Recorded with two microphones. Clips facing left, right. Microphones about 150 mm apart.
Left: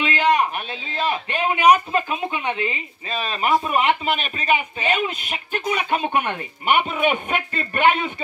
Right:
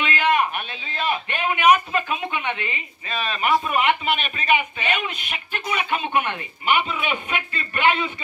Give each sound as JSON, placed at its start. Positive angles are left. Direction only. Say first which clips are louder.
{"t": 0.0, "sound": "a man's voice", "louder": "left 2 dB", "side_deg": 35}